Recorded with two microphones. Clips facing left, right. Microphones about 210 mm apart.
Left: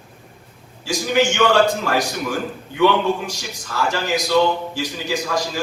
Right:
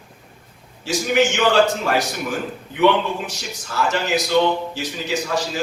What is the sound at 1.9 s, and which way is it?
Speech, 30° left (ahead or behind).